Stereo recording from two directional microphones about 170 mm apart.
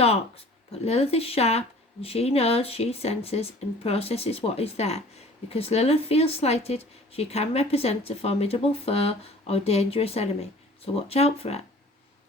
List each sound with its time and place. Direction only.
0.0 s speech: 35° left (ahead or behind)